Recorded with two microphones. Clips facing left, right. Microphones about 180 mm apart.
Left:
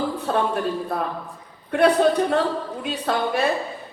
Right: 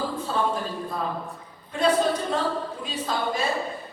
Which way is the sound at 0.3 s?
65° left (ahead or behind).